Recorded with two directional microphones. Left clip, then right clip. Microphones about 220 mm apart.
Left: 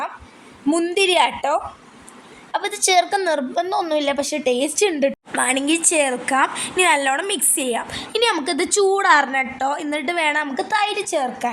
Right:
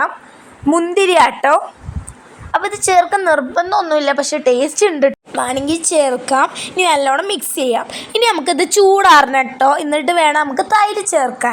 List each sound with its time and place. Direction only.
0.7 s a woman's voice: 10° right (ahead or behind)
2.5 s a woman's voice: 5° right (ahead or behind)